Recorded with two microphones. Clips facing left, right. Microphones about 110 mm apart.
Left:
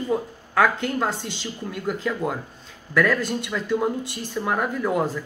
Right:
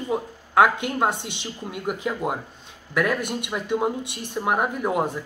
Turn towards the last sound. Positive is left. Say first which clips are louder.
# left 1 dB
turn(degrees=-20)  # may be behind; listen again after turning